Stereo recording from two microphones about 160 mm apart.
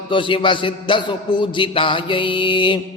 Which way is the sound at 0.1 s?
30° left (ahead or behind).